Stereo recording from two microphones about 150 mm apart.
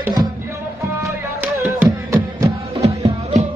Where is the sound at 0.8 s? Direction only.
15° right (ahead or behind).